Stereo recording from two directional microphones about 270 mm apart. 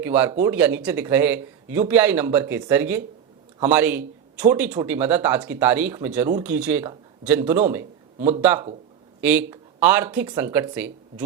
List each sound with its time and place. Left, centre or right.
0.0 s a man's voice: centre